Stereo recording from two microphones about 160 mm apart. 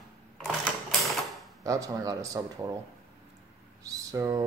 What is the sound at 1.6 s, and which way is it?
Speech, 20° right (ahead or behind).